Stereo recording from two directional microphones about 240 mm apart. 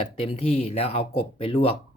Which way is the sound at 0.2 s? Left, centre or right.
Left.